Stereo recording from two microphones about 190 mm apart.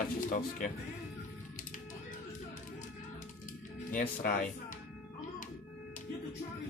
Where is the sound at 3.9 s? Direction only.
45° left (ahead or behind).